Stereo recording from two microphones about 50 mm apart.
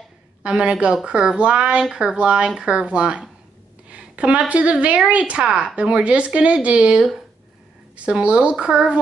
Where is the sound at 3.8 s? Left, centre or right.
Right.